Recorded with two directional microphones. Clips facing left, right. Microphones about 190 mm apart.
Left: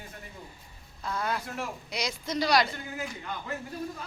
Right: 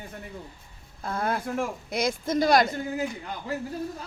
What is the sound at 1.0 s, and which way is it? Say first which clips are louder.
A woman's voice: right 4 dB; 50° right (ahead or behind).